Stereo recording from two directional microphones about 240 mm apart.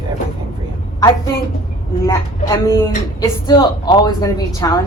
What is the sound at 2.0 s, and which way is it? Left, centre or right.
A woman's voice, centre.